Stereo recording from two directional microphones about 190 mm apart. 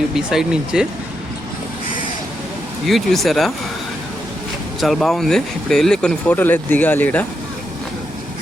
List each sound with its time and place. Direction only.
0.1 s speech: 5° right (ahead or behind)
2.8 s speech: centre (ahead or behind)
4.8 s speech: centre (ahead or behind)